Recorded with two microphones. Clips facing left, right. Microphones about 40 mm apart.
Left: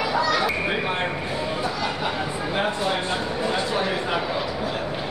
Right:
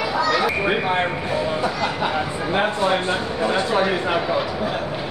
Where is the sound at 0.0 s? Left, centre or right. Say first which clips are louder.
Right 2 dB; centre.